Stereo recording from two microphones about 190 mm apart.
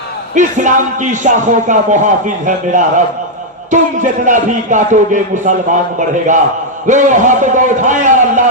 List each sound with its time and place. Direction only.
0.3 s a man's voice: 40° right (ahead or behind)